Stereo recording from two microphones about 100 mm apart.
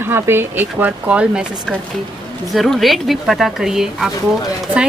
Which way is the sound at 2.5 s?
Centre (ahead or behind).